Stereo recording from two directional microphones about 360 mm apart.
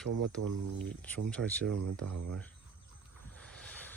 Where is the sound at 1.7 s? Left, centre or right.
Right.